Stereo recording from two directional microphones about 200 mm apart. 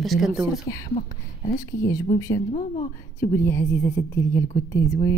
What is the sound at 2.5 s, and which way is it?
Speech, 40° left (ahead or behind).